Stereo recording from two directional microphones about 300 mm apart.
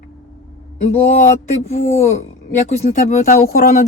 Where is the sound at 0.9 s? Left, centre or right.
Left.